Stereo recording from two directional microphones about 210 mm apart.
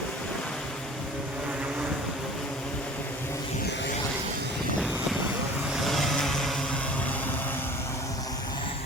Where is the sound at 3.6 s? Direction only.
55° left (ahead or behind).